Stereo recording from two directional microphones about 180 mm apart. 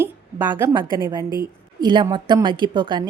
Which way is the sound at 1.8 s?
25° right (ahead or behind).